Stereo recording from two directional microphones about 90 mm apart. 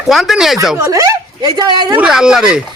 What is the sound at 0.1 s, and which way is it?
Speech, centre (ahead or behind).